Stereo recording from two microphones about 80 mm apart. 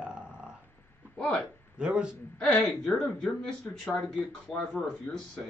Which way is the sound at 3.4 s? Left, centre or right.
Centre.